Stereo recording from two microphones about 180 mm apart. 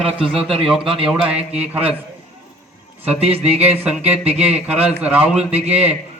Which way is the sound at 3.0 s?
35° right (ahead or behind).